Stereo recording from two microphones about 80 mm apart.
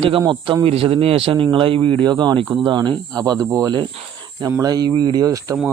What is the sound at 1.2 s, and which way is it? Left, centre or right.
Speech, right.